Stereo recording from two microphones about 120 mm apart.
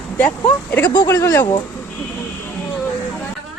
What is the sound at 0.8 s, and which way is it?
Speech, 40° left (ahead or behind).